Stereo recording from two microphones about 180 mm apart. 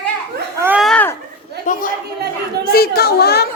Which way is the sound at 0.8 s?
5° left (ahead or behind).